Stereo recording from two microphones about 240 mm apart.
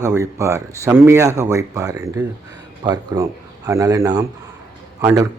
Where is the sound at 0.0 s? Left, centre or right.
Centre.